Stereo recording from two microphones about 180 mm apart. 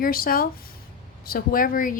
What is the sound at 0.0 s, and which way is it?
A woman's voice, 55° left (ahead or behind).